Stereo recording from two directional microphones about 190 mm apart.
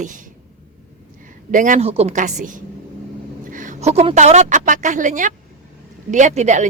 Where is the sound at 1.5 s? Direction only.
45° right (ahead or behind).